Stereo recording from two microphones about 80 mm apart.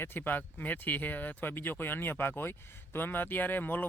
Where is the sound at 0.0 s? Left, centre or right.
Left.